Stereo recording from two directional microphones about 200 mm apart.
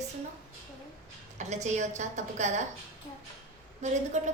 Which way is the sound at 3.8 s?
35° right (ahead or behind).